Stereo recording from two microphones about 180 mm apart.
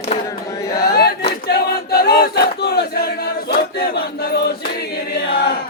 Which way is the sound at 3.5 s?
60° left (ahead or behind).